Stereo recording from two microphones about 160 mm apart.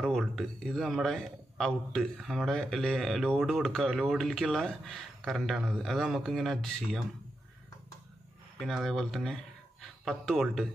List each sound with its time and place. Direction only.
0.0 s a man's voice: centre (ahead or behind)
8.5 s speech: centre (ahead or behind)